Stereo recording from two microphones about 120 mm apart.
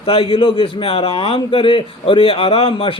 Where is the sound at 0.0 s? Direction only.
50° left (ahead or behind).